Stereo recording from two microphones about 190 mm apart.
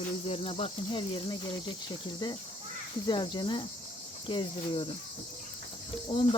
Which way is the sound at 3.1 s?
25° left (ahead or behind).